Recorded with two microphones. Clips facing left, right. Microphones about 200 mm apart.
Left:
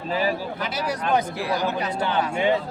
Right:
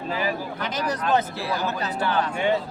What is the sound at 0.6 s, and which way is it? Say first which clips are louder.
Speech: right 2 dB; 10° left (ahead or behind).